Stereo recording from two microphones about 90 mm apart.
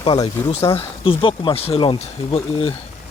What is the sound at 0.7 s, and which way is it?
Speech, 90° left.